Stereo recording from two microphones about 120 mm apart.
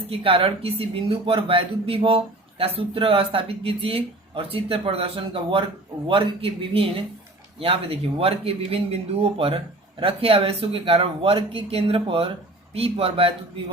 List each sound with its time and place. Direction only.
0.1 s speech: 50° right (ahead or behind)